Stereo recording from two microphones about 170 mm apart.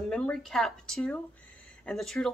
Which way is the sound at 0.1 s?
5° left (ahead or behind).